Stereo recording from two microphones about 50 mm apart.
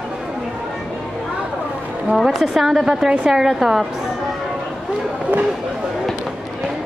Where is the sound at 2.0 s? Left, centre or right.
Centre.